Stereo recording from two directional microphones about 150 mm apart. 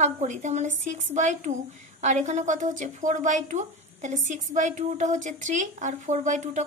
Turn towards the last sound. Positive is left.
turn(degrees=-55)  # may be behind; listen again after turning